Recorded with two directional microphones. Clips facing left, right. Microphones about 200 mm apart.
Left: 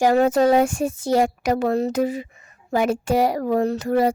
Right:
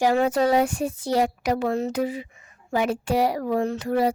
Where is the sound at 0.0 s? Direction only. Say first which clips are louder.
Left 4 dB; 45° left (ahead or behind).